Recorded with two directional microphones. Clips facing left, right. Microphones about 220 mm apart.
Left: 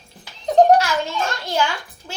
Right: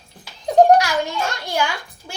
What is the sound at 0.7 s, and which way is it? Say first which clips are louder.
Children playing: right 1 dB; 15° right (ahead or behind).